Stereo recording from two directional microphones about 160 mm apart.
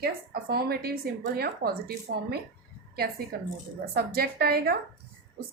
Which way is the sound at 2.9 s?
75° right (ahead or behind).